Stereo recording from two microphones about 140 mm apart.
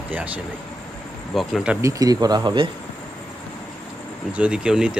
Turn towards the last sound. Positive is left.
turn(degrees=-5)  # may be behind; listen again after turning